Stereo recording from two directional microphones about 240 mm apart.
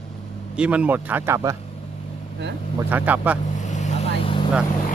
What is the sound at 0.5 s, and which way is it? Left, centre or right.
Speech, centre.